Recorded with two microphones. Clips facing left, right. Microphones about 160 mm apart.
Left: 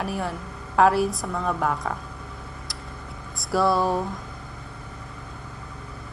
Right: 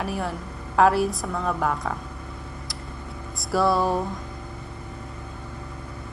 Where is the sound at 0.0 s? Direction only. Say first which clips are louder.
Even; centre (ahead or behind).